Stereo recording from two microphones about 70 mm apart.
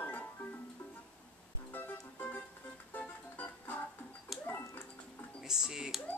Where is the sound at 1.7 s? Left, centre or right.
Left.